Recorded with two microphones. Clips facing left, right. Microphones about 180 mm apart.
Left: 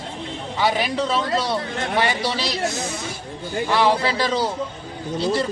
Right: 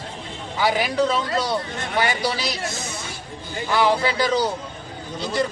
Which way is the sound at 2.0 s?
30° left (ahead or behind).